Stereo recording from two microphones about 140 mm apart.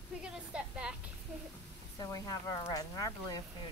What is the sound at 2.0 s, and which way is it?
Speech, 25° left (ahead or behind).